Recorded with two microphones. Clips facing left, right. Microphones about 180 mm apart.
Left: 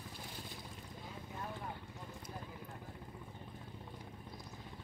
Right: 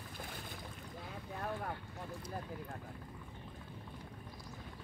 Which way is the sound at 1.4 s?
60° right (ahead or behind).